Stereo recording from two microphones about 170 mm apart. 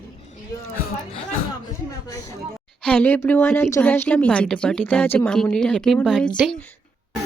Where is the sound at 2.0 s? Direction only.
20° left (ahead or behind).